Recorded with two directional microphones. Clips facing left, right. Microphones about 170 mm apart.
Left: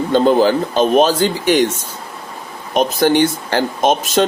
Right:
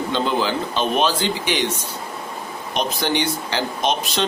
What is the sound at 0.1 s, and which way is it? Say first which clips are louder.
Speech: left 11 dB; 45° left (ahead or behind).